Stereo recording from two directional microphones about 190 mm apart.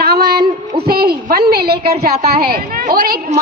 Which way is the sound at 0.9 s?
55° right (ahead or behind).